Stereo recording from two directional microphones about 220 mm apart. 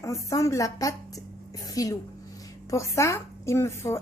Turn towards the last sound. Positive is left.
turn(degrees=10)  # may be behind; listen again after turning